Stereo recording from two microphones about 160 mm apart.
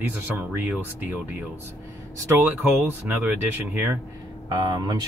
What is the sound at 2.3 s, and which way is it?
Speech, 10° right (ahead or behind).